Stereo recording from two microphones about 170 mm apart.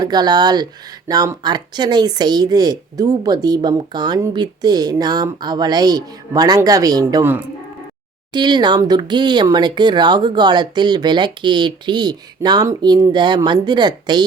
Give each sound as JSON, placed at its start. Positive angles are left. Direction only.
{"t": 0.0, "sound": "speech", "side_deg": -25}
{"t": 8.3, "sound": "speech", "side_deg": -25}